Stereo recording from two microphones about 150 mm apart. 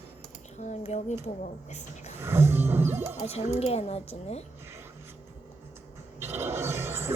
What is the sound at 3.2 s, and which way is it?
Speech, 45° left (ahead or behind).